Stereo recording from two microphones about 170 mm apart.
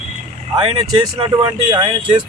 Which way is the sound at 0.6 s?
30° right (ahead or behind).